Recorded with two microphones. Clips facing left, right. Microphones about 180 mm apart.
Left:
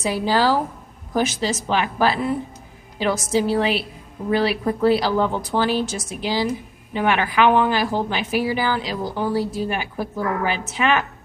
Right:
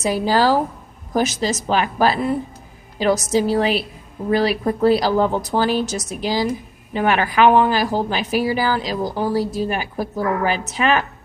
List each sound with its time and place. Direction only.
0.0 s a woman's voice: 40° right (ahead or behind)